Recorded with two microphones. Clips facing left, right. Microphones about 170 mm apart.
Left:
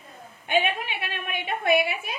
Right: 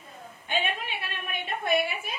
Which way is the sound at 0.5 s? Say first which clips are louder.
Left 5 dB; 65° left (ahead or behind).